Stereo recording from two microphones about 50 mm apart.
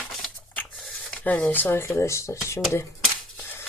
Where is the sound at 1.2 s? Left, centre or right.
Left.